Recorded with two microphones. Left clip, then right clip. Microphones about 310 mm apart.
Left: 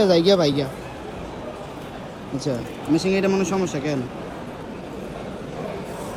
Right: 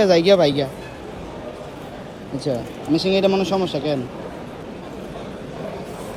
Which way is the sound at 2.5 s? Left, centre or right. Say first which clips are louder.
Right 2 dB; centre.